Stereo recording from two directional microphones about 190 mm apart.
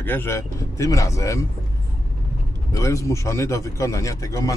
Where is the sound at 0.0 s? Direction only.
10° left (ahead or behind).